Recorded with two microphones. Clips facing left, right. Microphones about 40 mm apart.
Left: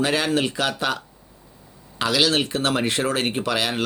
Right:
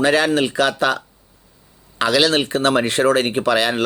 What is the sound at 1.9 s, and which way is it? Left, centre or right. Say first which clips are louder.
Speech: right 4 dB; centre.